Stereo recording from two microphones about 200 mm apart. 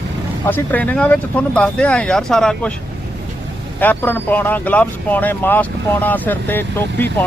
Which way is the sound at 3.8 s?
10° left (ahead or behind).